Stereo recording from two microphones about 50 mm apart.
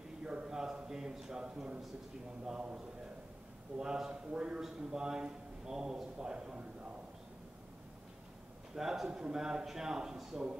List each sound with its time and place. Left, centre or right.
0.2 s a man's voice: centre
8.7 s a man's voice: centre